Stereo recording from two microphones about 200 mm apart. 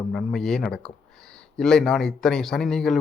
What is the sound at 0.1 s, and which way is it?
Speech, centre (ahead or behind).